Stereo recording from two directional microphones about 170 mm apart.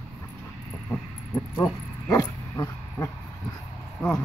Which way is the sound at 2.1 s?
20° left (ahead or behind).